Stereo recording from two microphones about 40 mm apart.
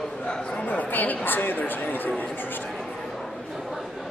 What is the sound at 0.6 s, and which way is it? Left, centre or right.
Speech, left.